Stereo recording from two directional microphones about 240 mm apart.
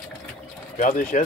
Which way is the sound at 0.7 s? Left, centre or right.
Left.